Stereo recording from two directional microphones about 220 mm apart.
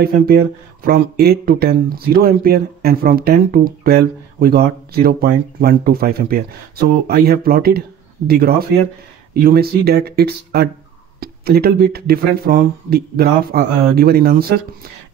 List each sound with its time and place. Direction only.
0.0 s speech: 45° right (ahead or behind)